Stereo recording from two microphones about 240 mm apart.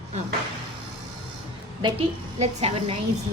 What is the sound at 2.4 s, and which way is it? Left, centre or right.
Speech, right.